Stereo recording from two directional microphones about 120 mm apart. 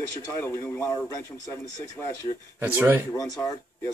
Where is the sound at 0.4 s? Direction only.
25° left (ahead or behind).